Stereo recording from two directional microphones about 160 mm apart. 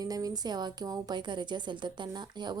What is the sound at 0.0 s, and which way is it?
A woman's voice, 25° right (ahead or behind).